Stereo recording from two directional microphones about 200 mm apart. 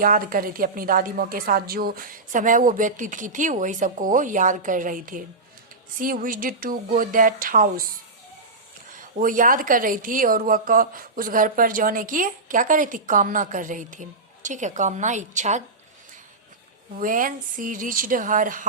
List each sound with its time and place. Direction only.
0.0 s speech: 45° right (ahead or behind)
9.0 s speech: 40° right (ahead or behind)
17.0 s speech: 40° right (ahead or behind)